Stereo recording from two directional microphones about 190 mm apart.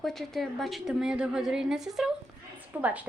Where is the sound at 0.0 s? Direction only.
Centre (ahead or behind).